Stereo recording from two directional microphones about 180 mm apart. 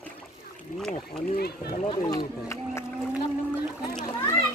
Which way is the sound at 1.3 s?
60° left (ahead or behind).